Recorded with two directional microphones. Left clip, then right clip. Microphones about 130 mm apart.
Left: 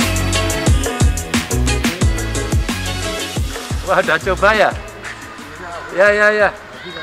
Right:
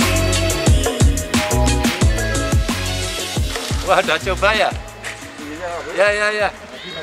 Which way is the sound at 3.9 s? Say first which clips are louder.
Left 2 dB; 25° right (ahead or behind).